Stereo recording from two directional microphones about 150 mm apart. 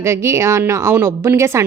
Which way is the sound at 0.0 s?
20° right (ahead or behind).